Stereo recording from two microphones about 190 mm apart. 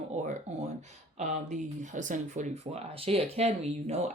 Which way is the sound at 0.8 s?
40° right (ahead or behind).